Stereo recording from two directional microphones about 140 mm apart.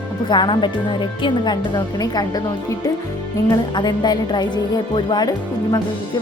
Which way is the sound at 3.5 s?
30° left (ahead or behind).